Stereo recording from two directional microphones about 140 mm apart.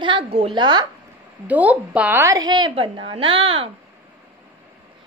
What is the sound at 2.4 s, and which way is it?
A woman's voice, 30° right (ahead or behind).